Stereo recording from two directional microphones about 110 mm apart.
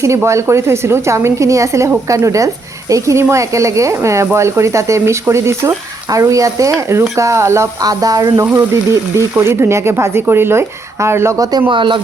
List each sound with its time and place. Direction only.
0.0 s speech: 25° right (ahead or behind)
11.7 s speech: 45° right (ahead or behind)